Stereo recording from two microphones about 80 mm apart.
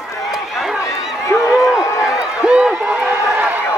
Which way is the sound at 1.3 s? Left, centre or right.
Left.